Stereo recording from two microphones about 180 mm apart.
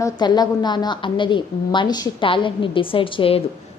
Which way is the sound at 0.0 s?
25° left (ahead or behind).